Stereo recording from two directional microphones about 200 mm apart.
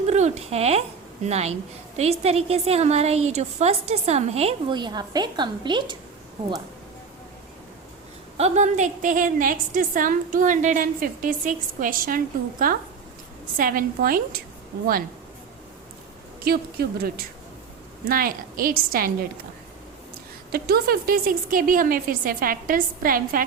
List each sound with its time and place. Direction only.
0.1 s a woman's voice: 35° right (ahead or behind)
8.4 s a woman's voice: 35° right (ahead or behind)
16.4 s a woman's voice: 50° right (ahead or behind)
20.5 s a woman's voice: 50° right (ahead or behind)